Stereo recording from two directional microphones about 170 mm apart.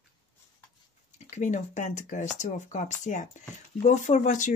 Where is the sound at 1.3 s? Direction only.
45° left (ahead or behind).